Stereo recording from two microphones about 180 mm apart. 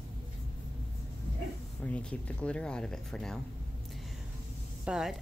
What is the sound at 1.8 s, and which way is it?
Speech, 5° left (ahead or behind).